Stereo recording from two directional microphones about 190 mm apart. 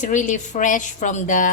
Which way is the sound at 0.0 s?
40° left (ahead or behind).